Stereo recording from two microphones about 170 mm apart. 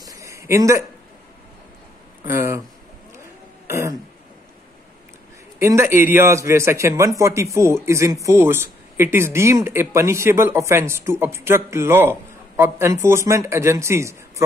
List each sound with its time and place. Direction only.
0.0 s a sound: 20° right (ahead or behind)
2.2 s a man's voice: 15° right (ahead or behind)
3.6 s throat clearing: 15° right (ahead or behind)
5.6 s a man's voice: 15° right (ahead or behind)